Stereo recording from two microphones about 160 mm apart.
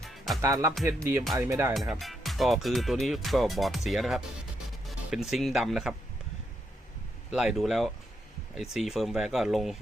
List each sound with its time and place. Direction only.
0.4 s speech: 15° right (ahead or behind)
1.7 s speech: centre (ahead or behind)
7.3 s speech: centre (ahead or behind)